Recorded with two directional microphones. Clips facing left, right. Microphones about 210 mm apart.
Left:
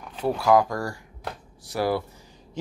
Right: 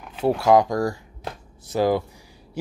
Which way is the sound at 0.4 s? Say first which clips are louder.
Right 2 dB; 20° right (ahead or behind).